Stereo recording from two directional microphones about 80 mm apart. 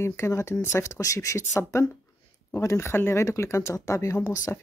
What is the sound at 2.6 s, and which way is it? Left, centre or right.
Speech, left.